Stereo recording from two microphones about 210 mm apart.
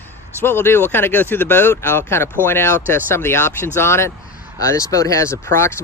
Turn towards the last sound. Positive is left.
turn(degrees=15)  # may be behind; listen again after turning